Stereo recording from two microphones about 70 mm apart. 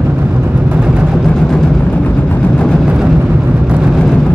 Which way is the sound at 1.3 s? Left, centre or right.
Centre.